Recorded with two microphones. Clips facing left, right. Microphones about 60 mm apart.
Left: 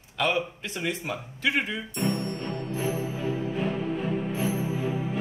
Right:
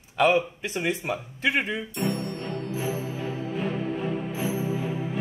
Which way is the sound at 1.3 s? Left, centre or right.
Right.